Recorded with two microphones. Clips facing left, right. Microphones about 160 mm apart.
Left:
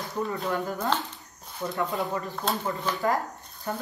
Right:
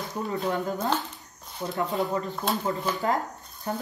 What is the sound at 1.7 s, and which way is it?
Speech, 20° right (ahead or behind).